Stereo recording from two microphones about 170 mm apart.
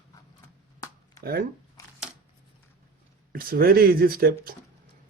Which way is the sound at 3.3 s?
60° right (ahead or behind).